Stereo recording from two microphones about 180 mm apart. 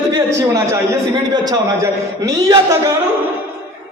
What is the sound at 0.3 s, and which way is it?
A man's voice, 15° right (ahead or behind).